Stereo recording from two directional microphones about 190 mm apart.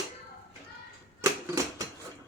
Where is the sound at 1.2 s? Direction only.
15° right (ahead or behind).